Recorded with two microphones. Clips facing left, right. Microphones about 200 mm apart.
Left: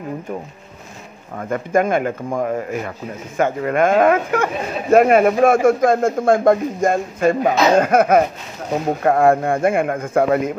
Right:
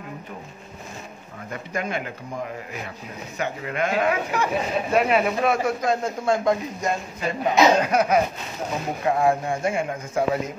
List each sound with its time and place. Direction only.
1.3 s a man's voice: 50° left (ahead or behind)